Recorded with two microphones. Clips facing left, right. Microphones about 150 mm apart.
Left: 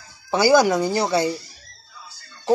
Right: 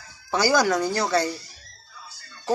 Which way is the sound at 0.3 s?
15° left (ahead or behind).